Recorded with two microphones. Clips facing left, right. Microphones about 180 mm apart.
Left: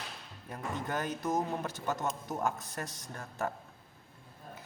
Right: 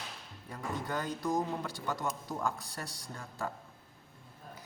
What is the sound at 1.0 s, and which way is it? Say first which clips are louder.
A man's voice: even; 20° left (ahead or behind).